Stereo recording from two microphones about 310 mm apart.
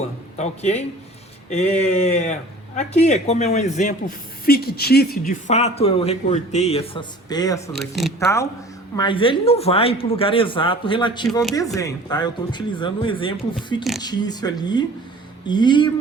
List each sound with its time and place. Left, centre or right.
0.3 s a man's voice: left
7.7 s speech: centre